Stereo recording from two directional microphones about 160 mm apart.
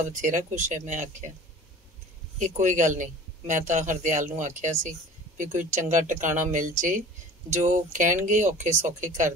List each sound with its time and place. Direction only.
0.0 s speech: 50° right (ahead or behind)
2.3 s speech: 50° right (ahead or behind)